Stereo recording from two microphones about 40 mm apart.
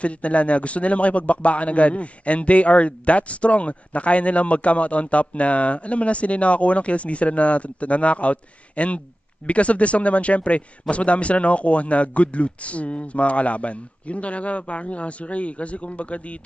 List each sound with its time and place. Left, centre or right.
0.0 s a man's voice: left